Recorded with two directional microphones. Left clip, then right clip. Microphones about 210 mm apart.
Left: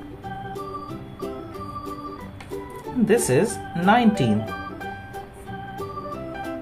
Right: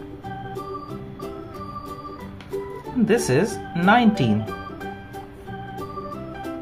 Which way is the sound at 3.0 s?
15° right (ahead or behind).